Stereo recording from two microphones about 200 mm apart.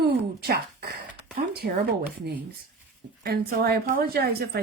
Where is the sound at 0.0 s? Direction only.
50° right (ahead or behind).